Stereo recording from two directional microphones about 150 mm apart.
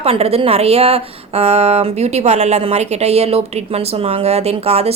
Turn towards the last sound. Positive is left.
turn(degrees=-45)  # may be behind; listen again after turning